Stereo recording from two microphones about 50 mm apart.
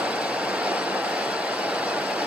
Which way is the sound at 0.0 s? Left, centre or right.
Right.